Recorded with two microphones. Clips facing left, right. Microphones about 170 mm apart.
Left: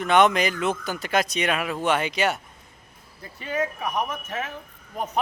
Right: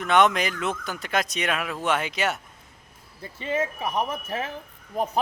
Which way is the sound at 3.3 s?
25° right (ahead or behind).